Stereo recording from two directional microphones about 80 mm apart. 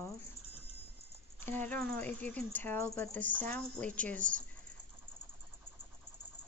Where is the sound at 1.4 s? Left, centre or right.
Left.